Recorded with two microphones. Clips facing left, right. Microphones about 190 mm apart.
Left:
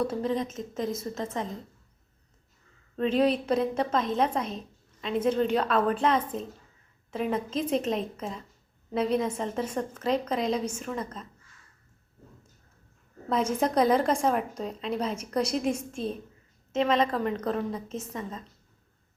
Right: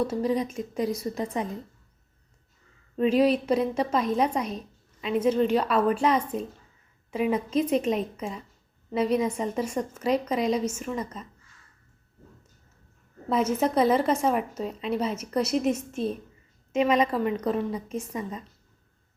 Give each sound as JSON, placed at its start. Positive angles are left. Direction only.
{"t": 0.1, "sound": "a woman's voice", "side_deg": -10}
{"t": 2.9, "sound": "a woman's voice", "side_deg": -10}
{"t": 13.2, "sound": "a woman's voice", "side_deg": -5}